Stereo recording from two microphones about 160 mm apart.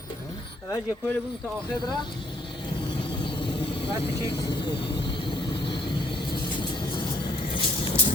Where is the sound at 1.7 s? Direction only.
25° left (ahead or behind).